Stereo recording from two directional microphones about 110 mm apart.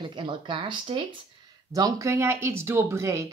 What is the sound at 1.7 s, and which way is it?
Speech, 30° right (ahead or behind).